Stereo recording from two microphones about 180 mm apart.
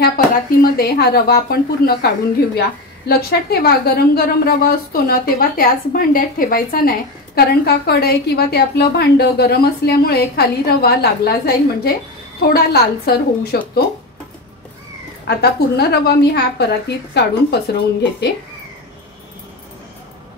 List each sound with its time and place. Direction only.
0.6 s a woman's voice: 55° left (ahead or behind)
15.2 s a woman's voice: 65° left (ahead or behind)